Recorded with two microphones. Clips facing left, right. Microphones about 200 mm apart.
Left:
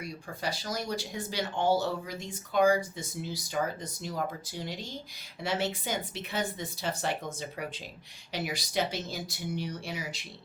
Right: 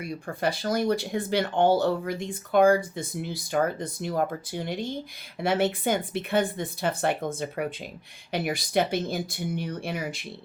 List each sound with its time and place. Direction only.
0.0 s speech: 55° right (ahead or behind)